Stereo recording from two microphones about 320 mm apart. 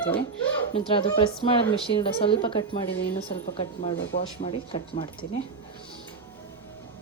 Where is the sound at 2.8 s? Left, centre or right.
Left.